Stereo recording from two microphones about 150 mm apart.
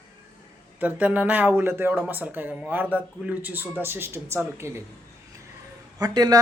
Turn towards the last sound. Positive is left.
turn(degrees=-25)  # may be behind; listen again after turning